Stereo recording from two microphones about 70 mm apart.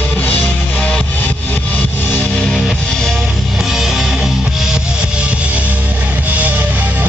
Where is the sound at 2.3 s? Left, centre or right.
Centre.